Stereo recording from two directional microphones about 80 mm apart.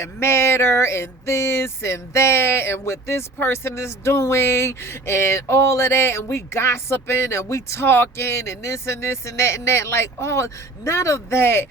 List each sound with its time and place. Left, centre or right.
0.0 s speech: left